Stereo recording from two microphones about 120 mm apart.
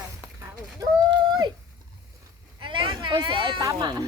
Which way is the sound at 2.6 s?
45° right (ahead or behind).